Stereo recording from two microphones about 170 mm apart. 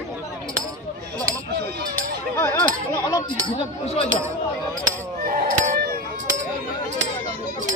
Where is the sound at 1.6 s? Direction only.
60° right (ahead or behind).